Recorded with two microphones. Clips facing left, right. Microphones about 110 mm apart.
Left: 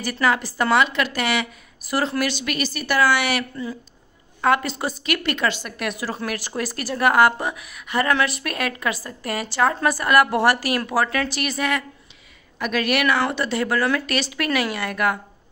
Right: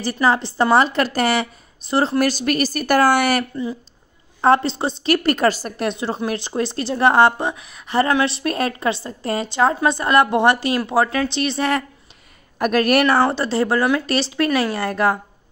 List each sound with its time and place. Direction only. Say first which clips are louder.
0.0 s a woman's voice: right 3 dB; 30° right (ahead or behind)
0.7 s speech: right 3 dB; 35° right (ahead or behind)
1.8 s a woman's voice: right 4 dB; 25° right (ahead or behind)
2.1 s a woman's voice: right 6 dB; 40° right (ahead or behind)
4.4 s a woman's voice: right 4 dB; 30° right (ahead or behind)
12.5 s a woman's voice: right 6 dB; 45° right (ahead or behind)
13.0 s speech: right 4 dB; 30° right (ahead or behind)